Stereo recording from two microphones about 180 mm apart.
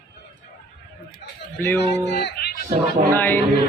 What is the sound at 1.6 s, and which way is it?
Speech, 10° left (ahead or behind).